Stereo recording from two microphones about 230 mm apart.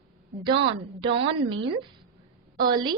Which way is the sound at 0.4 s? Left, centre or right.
Right.